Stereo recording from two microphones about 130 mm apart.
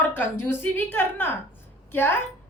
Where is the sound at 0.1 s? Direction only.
15° left (ahead or behind).